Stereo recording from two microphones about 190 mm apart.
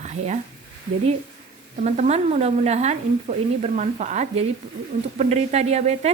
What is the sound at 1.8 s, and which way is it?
Speech, 40° right (ahead or behind).